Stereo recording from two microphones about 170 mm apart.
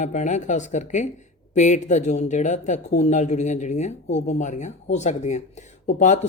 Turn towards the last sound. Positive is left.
turn(degrees=45)  # may be behind; listen again after turning